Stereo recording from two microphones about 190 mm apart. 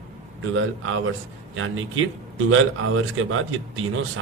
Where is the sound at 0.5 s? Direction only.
90° right.